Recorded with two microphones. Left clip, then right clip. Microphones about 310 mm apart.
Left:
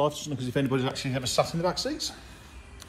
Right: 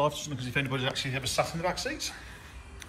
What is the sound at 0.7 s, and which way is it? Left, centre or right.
Speech, left.